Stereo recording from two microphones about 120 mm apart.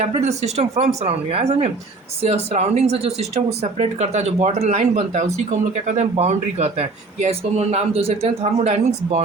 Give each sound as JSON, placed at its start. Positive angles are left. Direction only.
{"t": 0.2, "sound": "speech", "side_deg": -65}